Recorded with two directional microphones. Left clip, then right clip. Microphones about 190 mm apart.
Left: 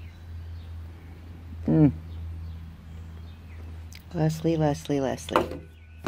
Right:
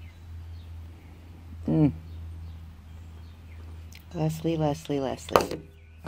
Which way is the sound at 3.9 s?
5° left (ahead or behind).